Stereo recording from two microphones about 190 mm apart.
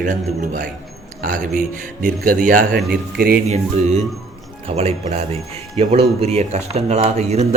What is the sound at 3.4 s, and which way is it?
Speech, 35° right (ahead or behind).